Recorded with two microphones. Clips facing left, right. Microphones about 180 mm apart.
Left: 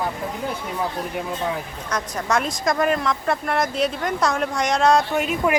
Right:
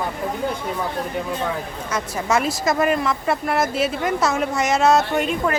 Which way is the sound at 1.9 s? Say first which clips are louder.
Right 1 dB; 5° right (ahead or behind).